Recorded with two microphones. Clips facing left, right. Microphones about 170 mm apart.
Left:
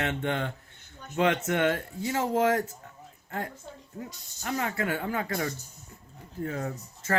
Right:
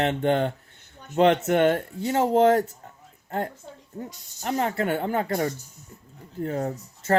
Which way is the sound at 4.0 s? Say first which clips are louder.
Right 5 dB; 35° right (ahead or behind).